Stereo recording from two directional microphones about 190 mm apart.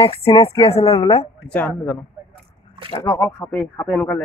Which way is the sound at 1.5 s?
10° left (ahead or behind).